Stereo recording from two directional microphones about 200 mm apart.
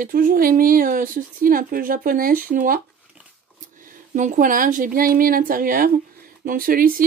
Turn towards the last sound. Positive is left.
turn(degrees=-45)  # may be behind; listen again after turning